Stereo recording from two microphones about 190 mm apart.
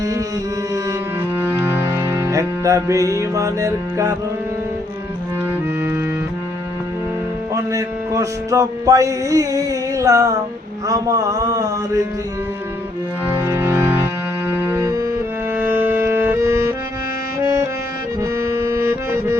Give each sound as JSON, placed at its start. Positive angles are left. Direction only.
{"t": 1.4, "sound": "music", "side_deg": -10}
{"t": 7.5, "sound": "music", "side_deg": -15}
{"t": 13.2, "sound": "music", "side_deg": -10}
{"t": 18.2, "sound": "accordion", "side_deg": -15}